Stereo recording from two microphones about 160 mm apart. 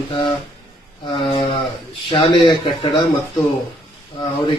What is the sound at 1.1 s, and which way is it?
Speech, 30° left (ahead or behind).